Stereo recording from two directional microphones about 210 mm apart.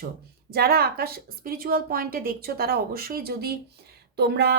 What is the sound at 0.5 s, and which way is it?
A woman's voice, 45° right (ahead or behind).